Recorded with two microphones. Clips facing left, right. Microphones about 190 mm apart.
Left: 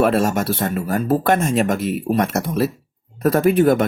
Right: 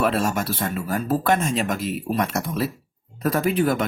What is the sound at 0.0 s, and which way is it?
Speech, 50° left (ahead or behind).